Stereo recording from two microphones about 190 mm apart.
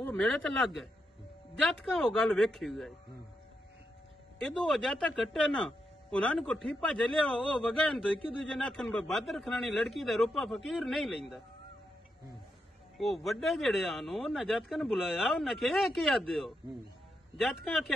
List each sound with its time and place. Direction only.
0.1 s speech: 5° left (ahead or behind)
4.6 s speech: centre (ahead or behind)
12.9 s speech: centre (ahead or behind)